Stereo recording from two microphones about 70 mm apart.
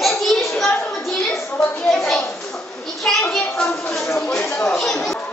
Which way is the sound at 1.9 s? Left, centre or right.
Centre.